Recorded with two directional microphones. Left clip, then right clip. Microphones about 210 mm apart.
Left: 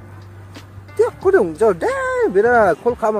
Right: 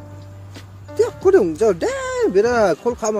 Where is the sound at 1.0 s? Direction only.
45° right (ahead or behind).